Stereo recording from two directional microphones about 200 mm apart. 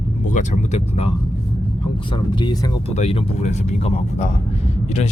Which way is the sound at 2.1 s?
25° left (ahead or behind).